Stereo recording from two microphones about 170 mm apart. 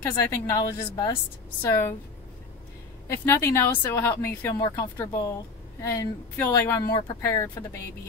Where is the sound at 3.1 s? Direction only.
15° left (ahead or behind).